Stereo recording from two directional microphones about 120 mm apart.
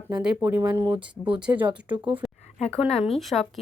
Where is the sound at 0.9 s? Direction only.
10° right (ahead or behind).